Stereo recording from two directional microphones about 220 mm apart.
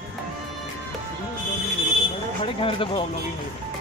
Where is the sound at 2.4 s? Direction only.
25° left (ahead or behind).